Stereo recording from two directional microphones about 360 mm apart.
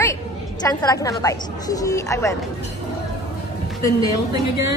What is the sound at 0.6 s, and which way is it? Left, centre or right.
A woman's voice, centre.